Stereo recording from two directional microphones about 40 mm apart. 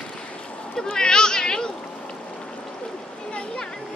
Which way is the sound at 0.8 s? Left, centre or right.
Centre.